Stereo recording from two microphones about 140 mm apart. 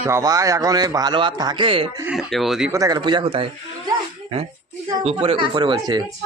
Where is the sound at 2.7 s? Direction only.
25° right (ahead or behind); by 3.5 s 40° right (ahead or behind).